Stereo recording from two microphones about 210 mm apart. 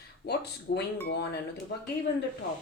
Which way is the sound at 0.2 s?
55° left (ahead or behind).